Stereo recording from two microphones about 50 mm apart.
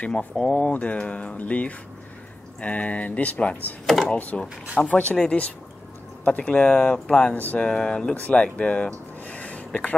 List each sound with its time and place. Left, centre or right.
0.0 s speech: left
3.8 s speech: centre
4.3 s speech: left
7.3 s speech: left
7.6 s speech: centre